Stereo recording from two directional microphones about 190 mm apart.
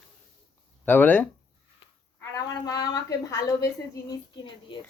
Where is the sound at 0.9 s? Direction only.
10° left (ahead or behind).